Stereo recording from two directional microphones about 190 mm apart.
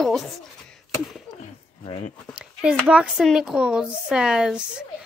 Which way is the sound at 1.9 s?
35° left (ahead or behind).